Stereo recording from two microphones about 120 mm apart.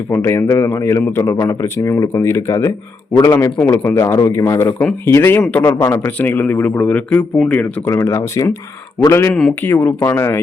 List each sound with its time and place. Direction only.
0.1 s speech: 20° left (ahead or behind)
3.9 s speech: 30° left (ahead or behind); by 5.6 s 10° left (ahead or behind)
5.6 s speech: 25° left (ahead or behind)
6.0 s speech: 15° left (ahead or behind)
7.9 s speech: 25° left (ahead or behind)